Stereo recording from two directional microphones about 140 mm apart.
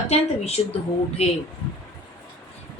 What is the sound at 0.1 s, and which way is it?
A woman's voice, 50° left (ahead or behind).